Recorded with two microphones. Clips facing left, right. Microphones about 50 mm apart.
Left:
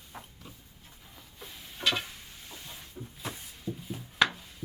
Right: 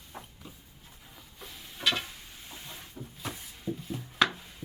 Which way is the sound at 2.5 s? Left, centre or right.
Centre.